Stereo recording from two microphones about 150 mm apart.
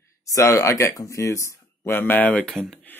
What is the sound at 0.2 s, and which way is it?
Speech, 20° left (ahead or behind).